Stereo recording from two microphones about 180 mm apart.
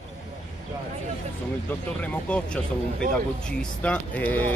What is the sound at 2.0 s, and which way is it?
Speech, 5° left (ahead or behind).